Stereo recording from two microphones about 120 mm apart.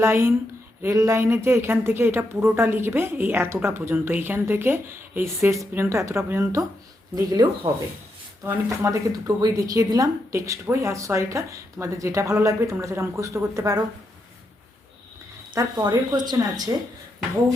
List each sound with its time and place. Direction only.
0.0 s a woman's voice: 20° right (ahead or behind)
15.7 s speech: 35° right (ahead or behind)